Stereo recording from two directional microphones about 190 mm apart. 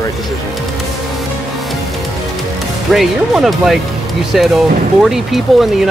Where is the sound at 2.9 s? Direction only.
Centre (ahead or behind).